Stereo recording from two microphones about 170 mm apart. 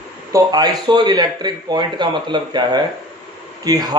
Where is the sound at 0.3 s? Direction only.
25° right (ahead or behind).